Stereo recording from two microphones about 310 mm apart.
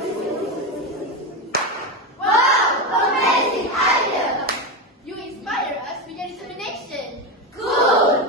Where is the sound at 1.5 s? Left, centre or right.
Right.